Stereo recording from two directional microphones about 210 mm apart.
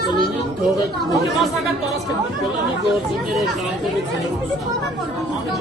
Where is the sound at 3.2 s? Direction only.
Centre (ahead or behind).